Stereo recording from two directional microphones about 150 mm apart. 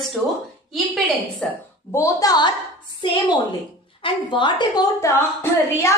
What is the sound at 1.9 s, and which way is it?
Speech, 20° left (ahead or behind).